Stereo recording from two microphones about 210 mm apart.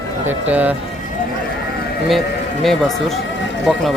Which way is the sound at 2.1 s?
Centre (ahead or behind).